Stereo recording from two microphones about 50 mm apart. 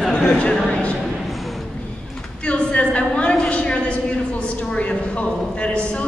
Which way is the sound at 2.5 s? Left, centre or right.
Left.